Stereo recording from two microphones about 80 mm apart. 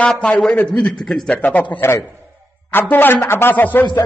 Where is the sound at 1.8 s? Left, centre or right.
Left.